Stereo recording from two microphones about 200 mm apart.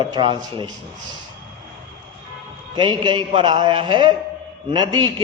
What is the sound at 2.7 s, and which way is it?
A man's voice, 20° right (ahead or behind).